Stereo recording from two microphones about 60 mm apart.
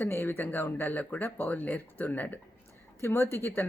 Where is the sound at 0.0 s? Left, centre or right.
Left.